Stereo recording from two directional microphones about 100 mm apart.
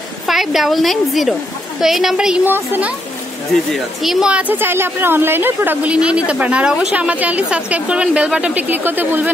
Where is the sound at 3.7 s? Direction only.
Centre (ahead or behind).